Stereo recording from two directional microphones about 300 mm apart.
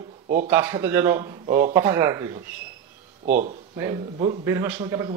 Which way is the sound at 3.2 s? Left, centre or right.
Right.